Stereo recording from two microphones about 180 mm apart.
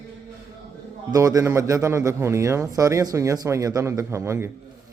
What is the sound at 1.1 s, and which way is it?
Speech, 20° right (ahead or behind).